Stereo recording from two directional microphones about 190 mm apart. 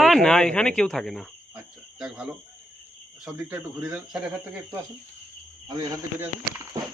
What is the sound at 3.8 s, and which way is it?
Speech, 5° right (ahead or behind).